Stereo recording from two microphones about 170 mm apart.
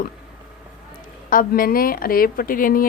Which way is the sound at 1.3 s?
55° left (ahead or behind).